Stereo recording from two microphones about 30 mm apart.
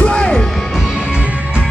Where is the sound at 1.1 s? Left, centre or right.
Right.